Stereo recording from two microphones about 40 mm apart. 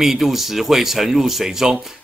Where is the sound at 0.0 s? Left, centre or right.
Centre.